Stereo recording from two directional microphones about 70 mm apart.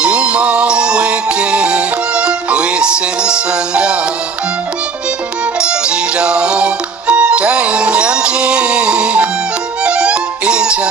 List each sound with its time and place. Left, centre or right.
0.0 s music: centre
5.5 s music: centre